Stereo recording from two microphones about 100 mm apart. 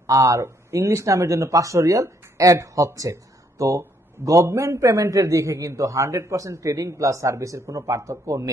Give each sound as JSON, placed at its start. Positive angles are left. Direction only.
{"t": 0.0, "sound": "speech", "side_deg": -35}